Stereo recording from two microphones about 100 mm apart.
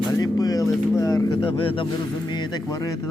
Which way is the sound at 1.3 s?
60° left (ahead or behind).